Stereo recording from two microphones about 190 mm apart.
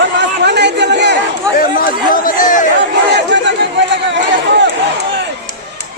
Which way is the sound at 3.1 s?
70° right (ahead or behind).